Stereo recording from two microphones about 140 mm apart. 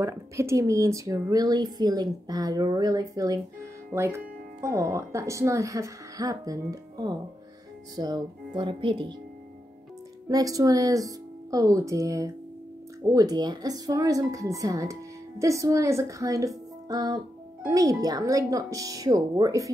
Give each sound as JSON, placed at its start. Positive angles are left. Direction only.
{"t": 0.0, "sound": "a woman's voice", "side_deg": -20}
{"t": 10.2, "sound": "a woman's voice", "side_deg": -25}